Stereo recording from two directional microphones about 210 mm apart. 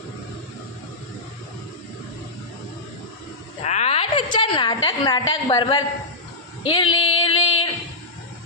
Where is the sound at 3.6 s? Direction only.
30° left (ahead or behind).